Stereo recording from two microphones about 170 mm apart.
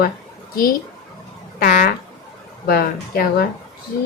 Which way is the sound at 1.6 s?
65° left (ahead or behind).